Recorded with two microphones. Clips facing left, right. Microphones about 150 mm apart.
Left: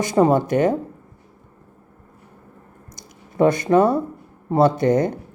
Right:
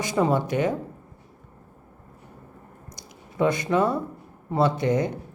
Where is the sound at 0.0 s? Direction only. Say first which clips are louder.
Left 6 dB; 45° left (ahead or behind).